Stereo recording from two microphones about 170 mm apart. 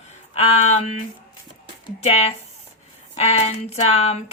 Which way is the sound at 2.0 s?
40° left (ahead or behind).